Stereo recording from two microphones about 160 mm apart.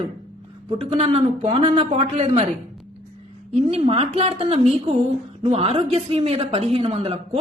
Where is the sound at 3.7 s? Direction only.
40° right (ahead or behind).